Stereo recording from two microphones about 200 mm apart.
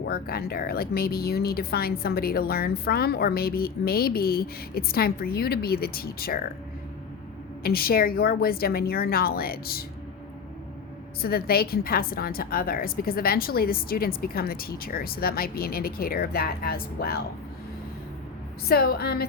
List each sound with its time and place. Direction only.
0.1 s speech: 50° left (ahead or behind)
7.6 s speech: 50° left (ahead or behind)
11.2 s speech: 50° left (ahead or behind)
18.7 s speech: 50° left (ahead or behind)